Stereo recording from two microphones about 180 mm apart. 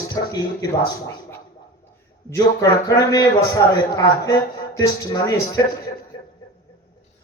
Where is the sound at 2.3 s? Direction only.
20° left (ahead or behind).